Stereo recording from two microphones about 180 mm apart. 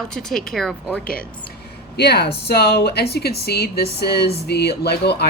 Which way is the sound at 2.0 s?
65° left (ahead or behind).